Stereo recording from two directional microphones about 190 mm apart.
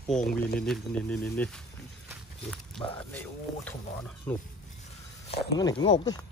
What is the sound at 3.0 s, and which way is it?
Speech, 10° left (ahead or behind).